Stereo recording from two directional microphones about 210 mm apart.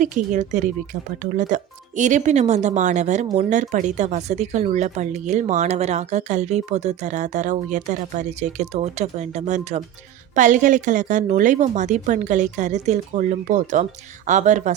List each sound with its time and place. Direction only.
0.0 s speech: 35° right (ahead or behind)